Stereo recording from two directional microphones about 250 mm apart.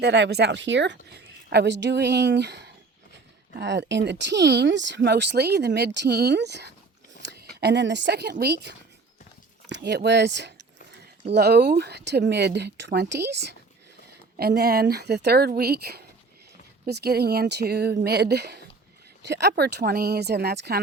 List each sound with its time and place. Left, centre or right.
0.0 s speech: right